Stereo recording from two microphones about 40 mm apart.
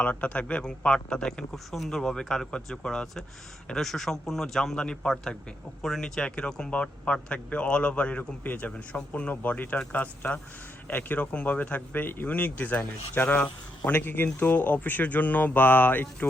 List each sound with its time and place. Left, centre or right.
0.0 s a man's voice: left
0.9 s speech: centre
1.5 s speech: centre
1.9 s speech: centre
4.8 s speech: left
6.1 s speech: left
8.4 s a man's voice: left
9.4 s speech: left
12.0 s speech: left
12.3 s speech: left
13.9 s speech: left